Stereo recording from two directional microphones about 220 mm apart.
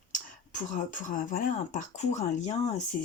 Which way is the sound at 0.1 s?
35° left (ahead or behind).